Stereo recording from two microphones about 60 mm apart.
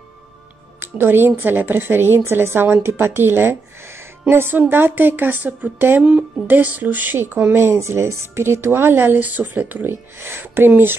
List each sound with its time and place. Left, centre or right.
0.7 s a woman's voice: right
5.9 s a woman's voice: centre
7.5 s a woman's voice: right